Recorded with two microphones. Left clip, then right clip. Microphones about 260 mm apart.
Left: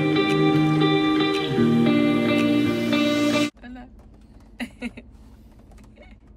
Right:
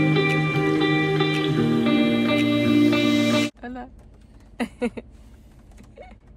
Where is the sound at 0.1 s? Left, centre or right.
Centre.